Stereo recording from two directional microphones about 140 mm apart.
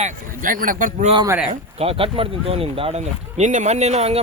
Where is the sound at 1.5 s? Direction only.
45° right (ahead or behind).